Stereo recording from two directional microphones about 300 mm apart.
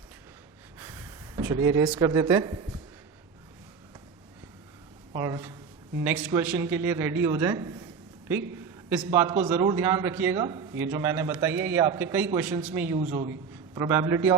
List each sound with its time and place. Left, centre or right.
0.8 s speech: centre
5.1 s a man's voice: centre
13.0 s a man's voice: right
13.7 s a man's voice: centre